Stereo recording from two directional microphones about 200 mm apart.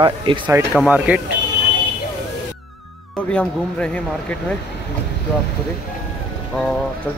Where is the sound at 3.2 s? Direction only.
5° left (ahead or behind).